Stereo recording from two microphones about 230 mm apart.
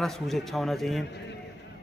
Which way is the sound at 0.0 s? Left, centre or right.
Centre.